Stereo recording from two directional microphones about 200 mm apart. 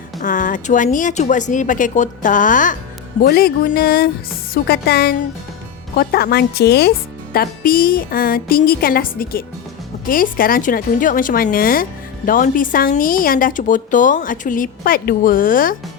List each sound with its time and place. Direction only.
0.2 s speech: 40° left (ahead or behind)